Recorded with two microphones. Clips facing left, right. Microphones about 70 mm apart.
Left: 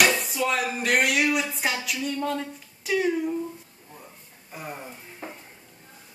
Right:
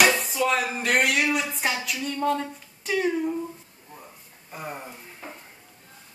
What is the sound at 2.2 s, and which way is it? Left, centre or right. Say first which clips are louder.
Speech: right 4 dB; centre.